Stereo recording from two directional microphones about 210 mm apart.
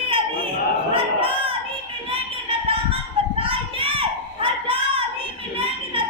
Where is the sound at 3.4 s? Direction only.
25° right (ahead or behind).